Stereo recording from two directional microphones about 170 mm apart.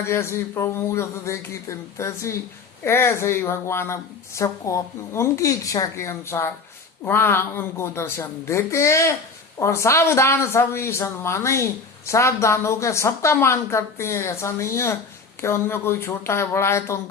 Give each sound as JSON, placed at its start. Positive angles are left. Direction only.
{"t": 0.0, "sound": "speech", "side_deg": 15}